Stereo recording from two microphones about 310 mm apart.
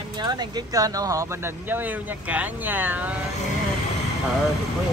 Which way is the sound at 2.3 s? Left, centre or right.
Centre.